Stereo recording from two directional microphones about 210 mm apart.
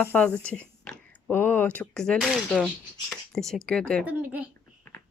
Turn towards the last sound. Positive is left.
turn(degrees=10)  # may be behind; listen again after turning